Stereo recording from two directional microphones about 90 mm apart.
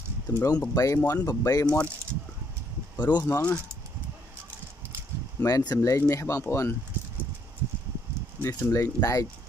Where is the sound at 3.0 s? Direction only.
50° left (ahead or behind).